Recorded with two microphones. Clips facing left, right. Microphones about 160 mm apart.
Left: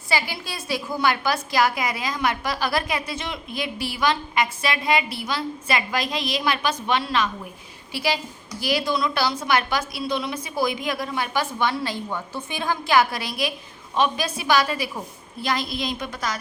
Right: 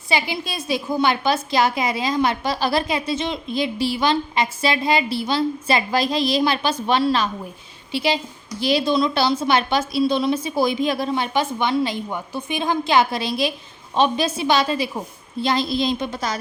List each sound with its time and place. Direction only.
0.1 s a woman's voice: 20° right (ahead or behind)
7.9 s a woman's voice: 25° right (ahead or behind)